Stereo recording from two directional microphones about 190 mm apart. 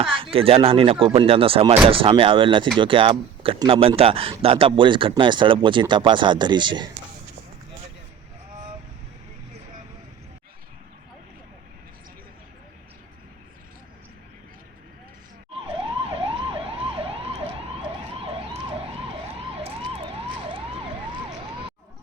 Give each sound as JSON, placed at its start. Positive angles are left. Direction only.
{"t": 0.0, "sound": "speech", "side_deg": -30}
{"t": 15.6, "sound": "emergency vehicle", "side_deg": -30}